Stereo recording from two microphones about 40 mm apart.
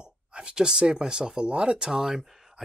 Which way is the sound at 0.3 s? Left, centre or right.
Centre.